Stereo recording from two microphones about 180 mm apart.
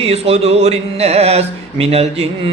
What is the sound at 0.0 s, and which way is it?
Speech, 35° right (ahead or behind).